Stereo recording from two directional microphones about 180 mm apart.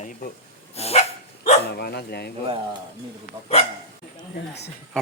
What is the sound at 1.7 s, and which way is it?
Speech, 60° left (ahead or behind).